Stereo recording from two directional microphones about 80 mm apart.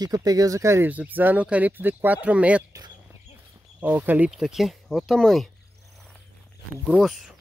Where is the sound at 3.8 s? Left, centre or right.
Right.